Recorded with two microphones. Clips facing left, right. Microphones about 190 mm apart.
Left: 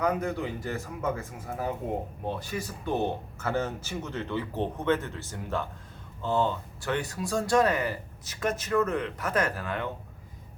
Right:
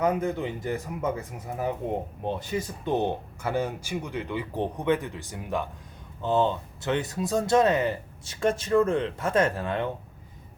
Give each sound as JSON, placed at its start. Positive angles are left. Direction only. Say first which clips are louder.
{"t": 0.0, "sound": "speech", "louder": "right 3 dB", "side_deg": -20}